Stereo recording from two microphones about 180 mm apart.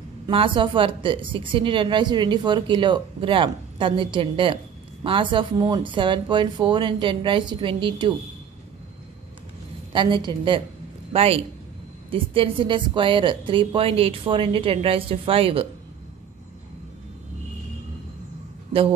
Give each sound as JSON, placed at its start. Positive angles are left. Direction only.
{"t": 0.3, "sound": "speech", "side_deg": -30}
{"t": 9.9, "sound": "a woman's voice", "side_deg": -25}
{"t": 18.7, "sound": "a man's voice", "side_deg": -30}